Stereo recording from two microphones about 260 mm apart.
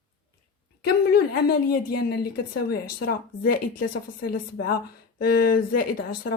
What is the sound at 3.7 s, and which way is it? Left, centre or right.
Speech, left.